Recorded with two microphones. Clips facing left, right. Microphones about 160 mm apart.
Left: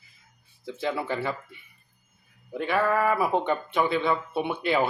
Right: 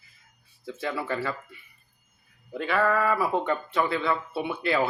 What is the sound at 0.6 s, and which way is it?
Speech, 20° left (ahead or behind).